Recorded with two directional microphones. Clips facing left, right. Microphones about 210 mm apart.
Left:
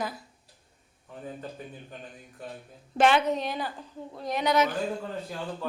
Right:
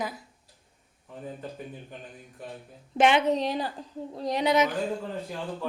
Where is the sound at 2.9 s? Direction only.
20° right (ahead or behind).